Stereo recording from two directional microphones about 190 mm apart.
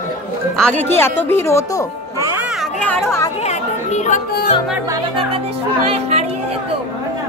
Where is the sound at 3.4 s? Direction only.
35° left (ahead or behind).